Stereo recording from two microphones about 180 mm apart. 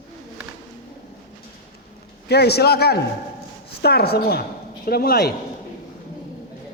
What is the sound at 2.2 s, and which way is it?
A man's voice, 65° left (ahead or behind).